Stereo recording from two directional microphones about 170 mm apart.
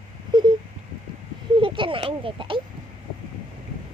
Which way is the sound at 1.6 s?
30° right (ahead or behind).